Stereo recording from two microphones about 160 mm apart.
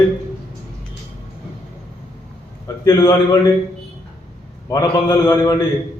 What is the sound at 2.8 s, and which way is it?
Speech, 20° left (ahead or behind).